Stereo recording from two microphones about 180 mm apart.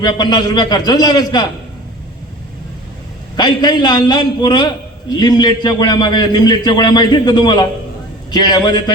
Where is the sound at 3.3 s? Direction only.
25° left (ahead or behind).